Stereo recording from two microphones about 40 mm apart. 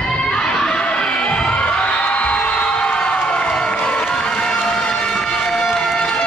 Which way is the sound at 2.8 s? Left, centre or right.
Left.